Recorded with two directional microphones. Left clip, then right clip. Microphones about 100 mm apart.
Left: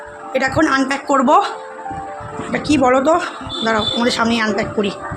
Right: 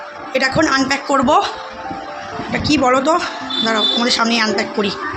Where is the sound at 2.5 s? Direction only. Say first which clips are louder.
Even; 40° left (ahead or behind).